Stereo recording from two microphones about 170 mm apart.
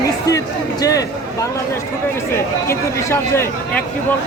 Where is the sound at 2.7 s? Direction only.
15° left (ahead or behind).